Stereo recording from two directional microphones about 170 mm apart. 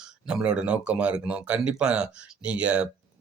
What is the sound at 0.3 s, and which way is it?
Speech, 5° right (ahead or behind).